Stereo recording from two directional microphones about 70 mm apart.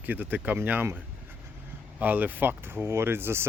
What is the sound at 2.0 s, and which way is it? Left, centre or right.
Speech, right.